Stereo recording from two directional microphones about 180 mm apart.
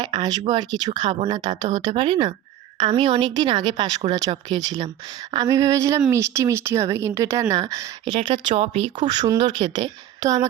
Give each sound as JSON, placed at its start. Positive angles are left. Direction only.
{"t": 0.0, "sound": "speech", "side_deg": -20}
{"t": 8.4, "sound": "speech", "side_deg": -35}
{"t": 9.0, "sound": "speech", "side_deg": -20}